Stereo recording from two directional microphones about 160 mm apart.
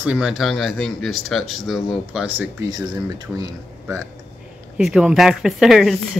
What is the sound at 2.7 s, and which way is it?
Speech, 25° right (ahead or behind).